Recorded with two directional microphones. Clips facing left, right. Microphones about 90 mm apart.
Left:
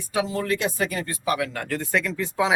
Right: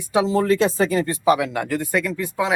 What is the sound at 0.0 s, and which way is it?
Speech, 25° right (ahead or behind).